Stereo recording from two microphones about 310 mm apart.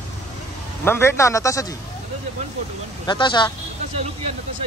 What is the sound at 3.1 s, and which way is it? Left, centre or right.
Speech, centre.